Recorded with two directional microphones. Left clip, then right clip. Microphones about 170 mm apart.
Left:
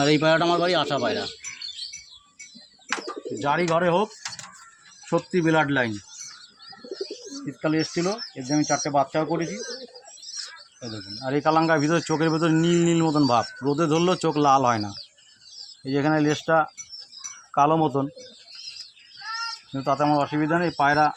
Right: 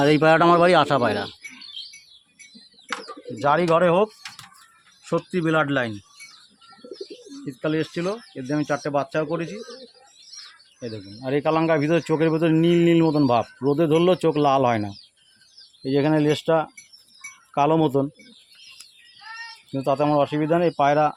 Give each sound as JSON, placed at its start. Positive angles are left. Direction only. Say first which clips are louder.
{"t": 0.0, "sound": "speech", "louder": "right 4 dB", "side_deg": -40}
{"t": 3.4, "sound": "speech", "louder": "right 4 dB", "side_deg": -80}
{"t": 5.0, "sound": "speech", "louder": "left 1 dB", "side_deg": -45}
{"t": 5.5, "sound": "speech", "louder": "right 1 dB", "side_deg": -25}
{"t": 7.4, "sound": "speech", "louder": "even", "side_deg": -30}
{"t": 11.2, "sound": "speech", "louder": "even", "side_deg": -40}
{"t": 15.8, "sound": "speech", "louder": "right 2 dB", "side_deg": -55}
{"t": 17.5, "sound": "speech", "louder": "right 1 dB", "side_deg": -45}
{"t": 19.7, "sound": "speech", "louder": "right 2 dB", "side_deg": -55}